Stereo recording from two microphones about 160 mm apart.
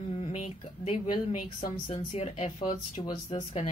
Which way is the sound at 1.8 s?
40° left (ahead or behind).